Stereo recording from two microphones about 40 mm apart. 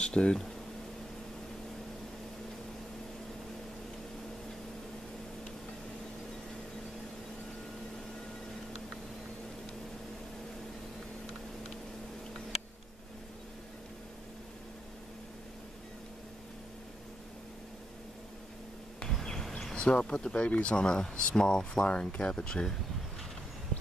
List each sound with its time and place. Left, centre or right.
0.0 s speech: left
19.7 s speech: left
20.7 s speech: left